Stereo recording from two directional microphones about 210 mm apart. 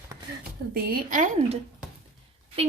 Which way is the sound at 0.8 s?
45° right (ahead or behind).